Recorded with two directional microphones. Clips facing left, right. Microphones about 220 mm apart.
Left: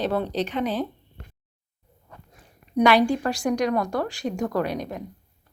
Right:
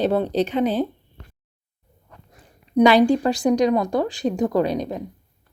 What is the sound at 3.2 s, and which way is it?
A woman's voice, 20° right (ahead or behind).